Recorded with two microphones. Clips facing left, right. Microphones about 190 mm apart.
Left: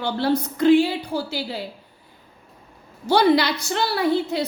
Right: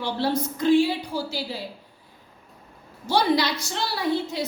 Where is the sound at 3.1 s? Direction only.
60° left (ahead or behind).